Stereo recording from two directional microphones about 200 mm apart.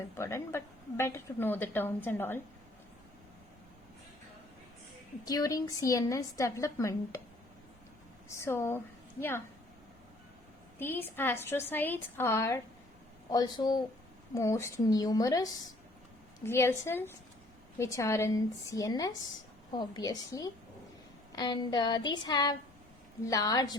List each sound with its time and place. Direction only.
0.2 s a woman's voice: 15° left (ahead or behind)
5.2 s a woman's voice: 15° left (ahead or behind)
8.4 s a woman's voice: 10° left (ahead or behind)
10.8 s a woman's voice: 10° left (ahead or behind)
13.3 s a sound: 20° left (ahead or behind)
14.3 s a woman's voice: 15° left (ahead or behind)
19.7 s a sound: 20° left (ahead or behind)
23.2 s a woman's voice: 15° left (ahead or behind)